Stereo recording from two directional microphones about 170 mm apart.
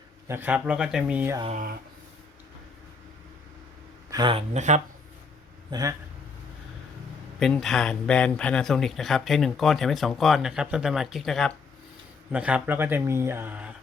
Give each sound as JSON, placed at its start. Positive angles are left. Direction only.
{"t": 0.3, "sound": "speech", "side_deg": -10}
{"t": 4.1, "sound": "speech", "side_deg": -30}
{"t": 4.5, "sound": "speech", "side_deg": -45}
{"t": 5.7, "sound": "speech", "side_deg": -25}
{"t": 7.3, "sound": "speech", "side_deg": 5}